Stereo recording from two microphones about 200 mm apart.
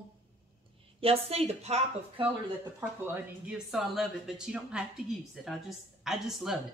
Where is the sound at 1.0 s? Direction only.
30° right (ahead or behind).